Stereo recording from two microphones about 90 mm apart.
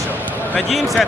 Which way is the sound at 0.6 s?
Centre (ahead or behind).